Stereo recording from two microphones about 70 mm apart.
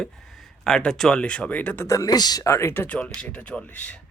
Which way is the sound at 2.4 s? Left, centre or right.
Left.